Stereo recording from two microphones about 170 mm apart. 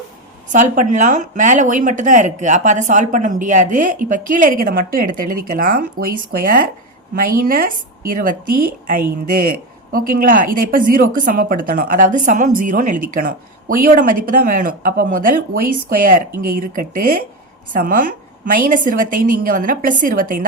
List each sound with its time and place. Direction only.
0.5 s a woman's voice: 50° right (ahead or behind)
9.9 s a woman's voice: 55° right (ahead or behind)